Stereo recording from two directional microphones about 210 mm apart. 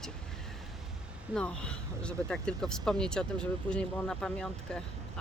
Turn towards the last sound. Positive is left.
turn(degrees=5)  # may be behind; listen again after turning